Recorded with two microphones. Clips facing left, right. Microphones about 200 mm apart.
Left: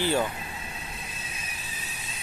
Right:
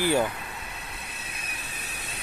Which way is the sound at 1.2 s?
65° right (ahead or behind).